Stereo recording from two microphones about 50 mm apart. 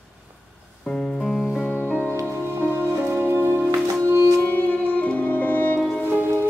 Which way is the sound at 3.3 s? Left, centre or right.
Right.